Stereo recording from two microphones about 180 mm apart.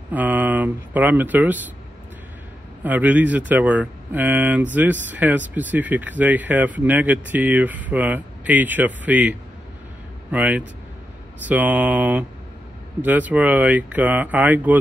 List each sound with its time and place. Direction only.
0.1 s speech: 10° right (ahead or behind)
2.8 s speech: 10° right (ahead or behind)
10.3 s speech: 10° right (ahead or behind)